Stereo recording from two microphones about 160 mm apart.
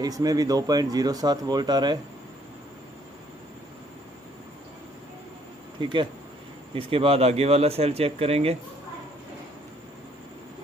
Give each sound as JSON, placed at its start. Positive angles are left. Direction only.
{"t": 0.0, "sound": "speech", "side_deg": -25}
{"t": 5.8, "sound": "speech", "side_deg": -30}